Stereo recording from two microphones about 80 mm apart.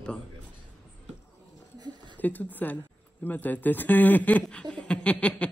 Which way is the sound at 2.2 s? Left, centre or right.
Left.